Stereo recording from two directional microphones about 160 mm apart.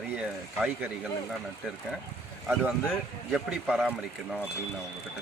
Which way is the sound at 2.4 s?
Centre (ahead or behind).